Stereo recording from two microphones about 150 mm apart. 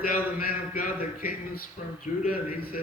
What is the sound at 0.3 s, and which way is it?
Speech, 75° left (ahead or behind).